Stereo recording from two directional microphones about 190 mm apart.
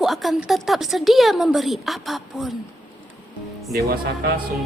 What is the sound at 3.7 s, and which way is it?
Speech, 50° right (ahead or behind).